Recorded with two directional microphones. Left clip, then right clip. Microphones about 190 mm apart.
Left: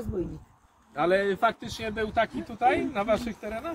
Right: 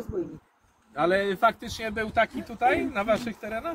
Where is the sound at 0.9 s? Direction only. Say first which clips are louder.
Even; 70° right (ahead or behind); by 2.2 s 30° right (ahead or behind).